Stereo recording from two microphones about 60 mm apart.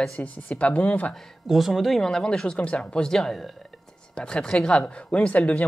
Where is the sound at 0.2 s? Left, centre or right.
Left.